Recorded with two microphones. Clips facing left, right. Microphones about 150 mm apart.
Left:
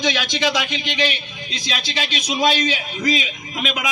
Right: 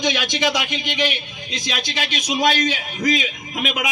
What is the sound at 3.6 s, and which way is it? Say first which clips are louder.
Speech: right 1 dB; 5° right (ahead or behind).